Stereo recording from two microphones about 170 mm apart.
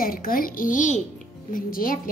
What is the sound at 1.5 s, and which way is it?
Speech, 55° left (ahead or behind).